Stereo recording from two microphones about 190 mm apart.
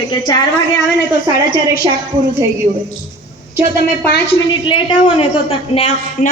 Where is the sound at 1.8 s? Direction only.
25° right (ahead or behind).